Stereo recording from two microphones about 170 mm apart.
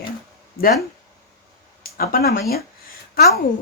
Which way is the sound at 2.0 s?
65° left (ahead or behind).